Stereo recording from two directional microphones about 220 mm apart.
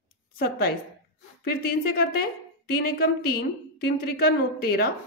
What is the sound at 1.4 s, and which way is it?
A woman's voice, 45° left (ahead or behind).